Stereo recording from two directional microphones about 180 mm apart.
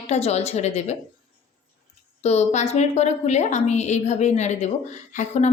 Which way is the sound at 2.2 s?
35° left (ahead or behind).